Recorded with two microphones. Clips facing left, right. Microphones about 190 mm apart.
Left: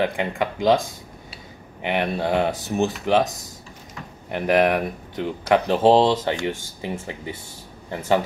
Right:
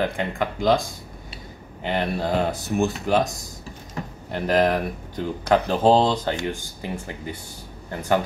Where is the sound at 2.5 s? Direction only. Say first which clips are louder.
Even; 20° left (ahead or behind).